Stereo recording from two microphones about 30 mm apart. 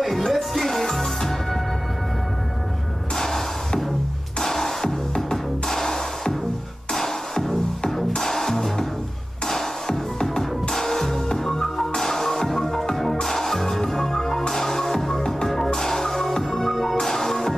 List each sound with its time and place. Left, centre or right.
0.0 s music: centre
3.2 s music: centre